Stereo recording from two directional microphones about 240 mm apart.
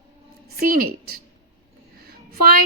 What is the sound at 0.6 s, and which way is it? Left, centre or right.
A woman's voice, right.